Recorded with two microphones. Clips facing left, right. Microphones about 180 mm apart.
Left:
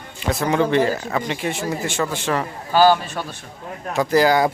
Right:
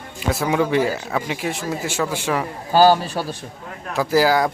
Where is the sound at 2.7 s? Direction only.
40° right (ahead or behind).